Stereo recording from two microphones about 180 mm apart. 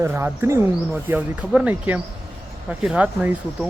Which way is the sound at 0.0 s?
15° right (ahead or behind).